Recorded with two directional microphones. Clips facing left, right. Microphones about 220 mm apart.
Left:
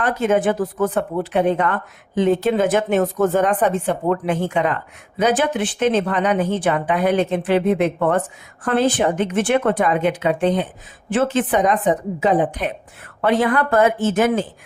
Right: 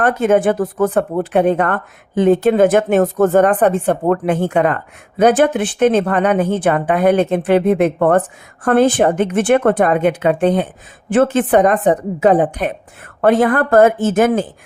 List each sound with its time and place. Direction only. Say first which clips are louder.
0.0 s speech: right 4 dB; 55° right (ahead or behind)